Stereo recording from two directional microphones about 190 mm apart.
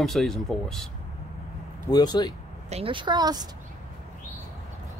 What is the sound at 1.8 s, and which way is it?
Speech, 20° left (ahead or behind).